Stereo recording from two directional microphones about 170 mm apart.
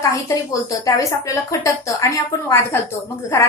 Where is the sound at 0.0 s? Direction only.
20° left (ahead or behind).